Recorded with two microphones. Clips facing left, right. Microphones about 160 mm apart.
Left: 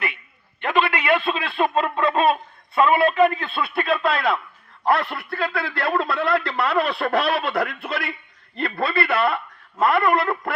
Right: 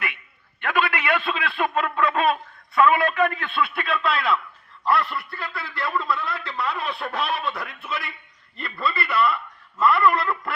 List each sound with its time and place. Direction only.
0.6 s a man's voice: 25° left (ahead or behind); by 10.5 s 45° left (ahead or behind)